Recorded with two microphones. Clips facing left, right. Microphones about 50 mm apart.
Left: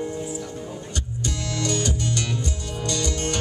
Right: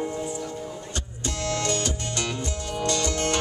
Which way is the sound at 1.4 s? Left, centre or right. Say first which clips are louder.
Even; right.